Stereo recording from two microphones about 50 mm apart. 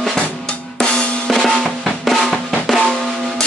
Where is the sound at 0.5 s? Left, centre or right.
Left.